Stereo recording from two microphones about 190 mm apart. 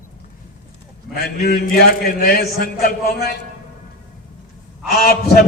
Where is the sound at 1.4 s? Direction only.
50° left (ahead or behind).